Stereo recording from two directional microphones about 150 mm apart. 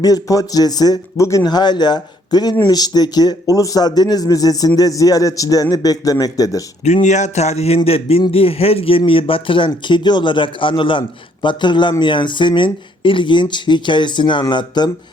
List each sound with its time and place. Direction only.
0.0 s a man's voice: 25° left (ahead or behind)
6.8 s speech: 50° left (ahead or behind); by 14.8 s 30° left (ahead or behind)